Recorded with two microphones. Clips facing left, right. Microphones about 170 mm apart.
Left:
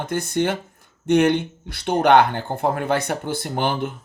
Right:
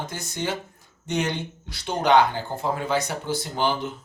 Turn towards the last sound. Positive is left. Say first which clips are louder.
# left 2 dB
turn(degrees=55)  # may be behind; listen again after turning